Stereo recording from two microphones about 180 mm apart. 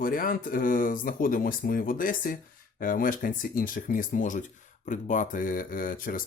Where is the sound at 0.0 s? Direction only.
50° left (ahead or behind).